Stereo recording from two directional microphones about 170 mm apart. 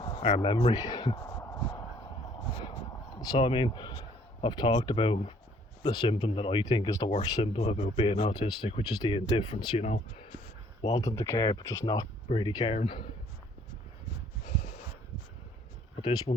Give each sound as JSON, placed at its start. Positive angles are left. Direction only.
{"t": 0.0, "sound": "speech", "side_deg": 30}
{"t": 3.2, "sound": "speech", "side_deg": 25}
{"t": 9.8, "sound": "speech", "side_deg": 40}
{"t": 10.9, "sound": "speech", "side_deg": 20}